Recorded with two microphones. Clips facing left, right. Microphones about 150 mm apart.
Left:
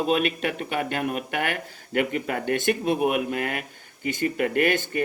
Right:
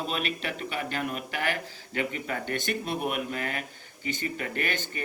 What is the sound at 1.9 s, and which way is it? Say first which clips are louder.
Speech: left 6 dB; 50° left (ahead or behind).